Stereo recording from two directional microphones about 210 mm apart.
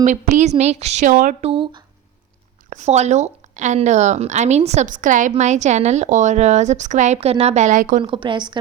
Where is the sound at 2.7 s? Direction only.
30° right (ahead or behind).